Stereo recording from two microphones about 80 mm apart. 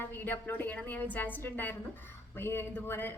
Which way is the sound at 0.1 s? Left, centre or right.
Left.